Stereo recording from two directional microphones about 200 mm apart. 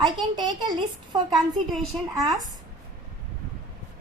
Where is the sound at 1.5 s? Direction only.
Centre (ahead or behind).